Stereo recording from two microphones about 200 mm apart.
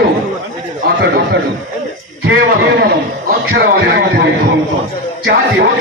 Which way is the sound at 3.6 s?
55° right (ahead or behind).